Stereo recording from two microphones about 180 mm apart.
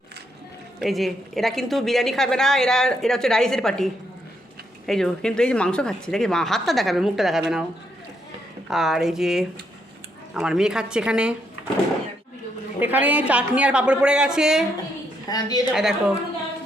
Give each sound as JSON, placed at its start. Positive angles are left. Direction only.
{"t": 0.8, "sound": "a woman's voice", "side_deg": 0}
{"t": 4.9, "sound": "a woman's voice", "side_deg": 5}
{"t": 8.7, "sound": "a woman's voice", "side_deg": 0}
{"t": 12.8, "sound": "a woman's voice", "side_deg": -10}
{"t": 15.3, "sound": "a woman's voice", "side_deg": 20}
{"t": 15.7, "sound": "a woman's voice", "side_deg": -5}